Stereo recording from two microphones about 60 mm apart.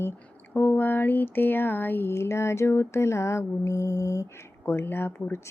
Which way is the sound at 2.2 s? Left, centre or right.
Left.